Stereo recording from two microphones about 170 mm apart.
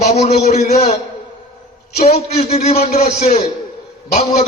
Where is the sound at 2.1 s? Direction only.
40° left (ahead or behind).